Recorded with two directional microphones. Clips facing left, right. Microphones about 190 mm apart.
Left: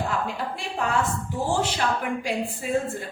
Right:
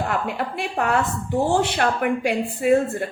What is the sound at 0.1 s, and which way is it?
A woman's voice, 65° right (ahead or behind).